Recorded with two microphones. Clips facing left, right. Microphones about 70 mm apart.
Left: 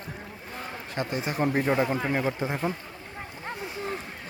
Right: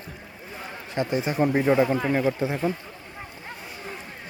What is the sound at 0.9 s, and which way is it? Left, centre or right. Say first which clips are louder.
A man's voice: right 5 dB; centre.